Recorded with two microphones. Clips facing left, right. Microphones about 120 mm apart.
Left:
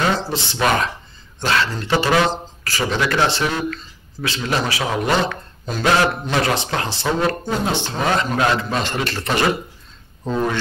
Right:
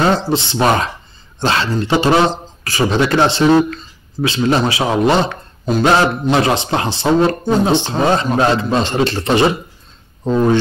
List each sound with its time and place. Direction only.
0.3 s a man's voice: 20° right (ahead or behind)